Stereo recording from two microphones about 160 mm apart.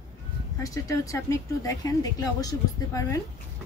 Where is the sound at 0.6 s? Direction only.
20° left (ahead or behind).